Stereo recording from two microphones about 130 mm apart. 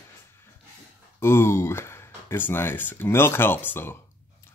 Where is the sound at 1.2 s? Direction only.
20° left (ahead or behind).